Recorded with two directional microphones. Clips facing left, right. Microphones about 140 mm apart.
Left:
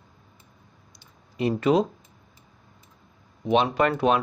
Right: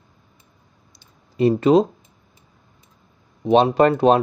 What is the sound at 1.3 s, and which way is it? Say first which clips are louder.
Speech: right 6 dB; 30° right (ahead or behind).